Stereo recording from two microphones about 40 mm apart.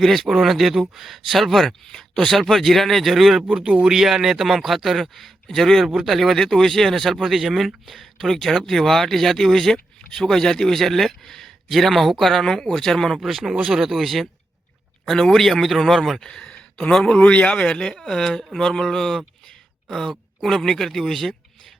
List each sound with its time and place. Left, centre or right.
0.0 s speech: centre
3.5 s speech: right
3.8 s speech: centre
13.1 s speech: centre
16.2 s speech: centre
16.6 s a sound: left
16.9 s speech: centre
17.2 s speech: left; by 21.2 s centre